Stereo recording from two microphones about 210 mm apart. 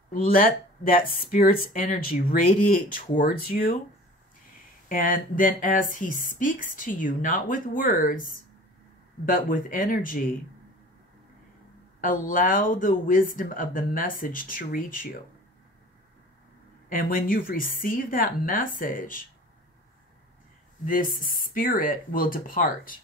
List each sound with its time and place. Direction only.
0.1 s speech: 40° left (ahead or behind)
4.8 s speech: 40° left (ahead or behind)
9.2 s speech: 40° left (ahead or behind)
12.0 s speech: 40° left (ahead or behind)
16.9 s speech: 40° left (ahead or behind)
20.8 s speech: 40° left (ahead or behind)